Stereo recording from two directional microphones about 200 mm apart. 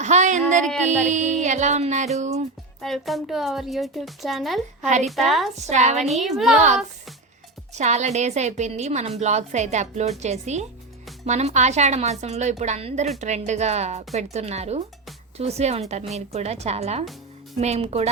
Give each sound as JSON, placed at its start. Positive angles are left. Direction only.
{"t": 0.0, "sound": "a sound", "side_deg": -35}
{"t": 0.9, "sound": "a woman's voice", "side_deg": -35}
{"t": 2.1, "sound": "music", "side_deg": -35}
{"t": 2.8, "sound": "speech", "side_deg": 0}
{"t": 5.5, "sound": "a woman's voice", "side_deg": -35}
{"t": 6.0, "sound": "speech", "side_deg": 0}
{"t": 7.7, "sound": "a woman's voice", "side_deg": -35}